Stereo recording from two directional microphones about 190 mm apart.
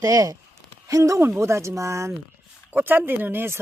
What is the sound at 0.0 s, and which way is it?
Speech, 20° right (ahead or behind).